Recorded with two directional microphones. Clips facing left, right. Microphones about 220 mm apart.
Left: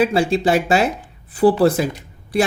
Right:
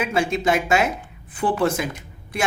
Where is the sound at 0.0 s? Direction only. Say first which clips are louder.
Left 5 dB; 35° left (ahead or behind).